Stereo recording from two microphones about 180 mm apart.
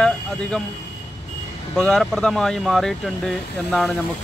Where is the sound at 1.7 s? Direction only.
5° left (ahead or behind).